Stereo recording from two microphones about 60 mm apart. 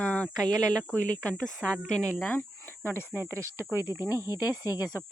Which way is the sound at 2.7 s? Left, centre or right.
Left.